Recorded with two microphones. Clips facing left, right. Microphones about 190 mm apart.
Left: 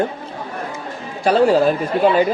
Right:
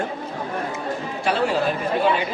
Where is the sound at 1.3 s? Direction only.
40° left (ahead or behind).